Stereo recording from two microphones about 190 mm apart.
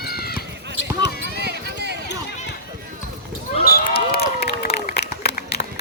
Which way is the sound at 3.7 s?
50° left (ahead or behind).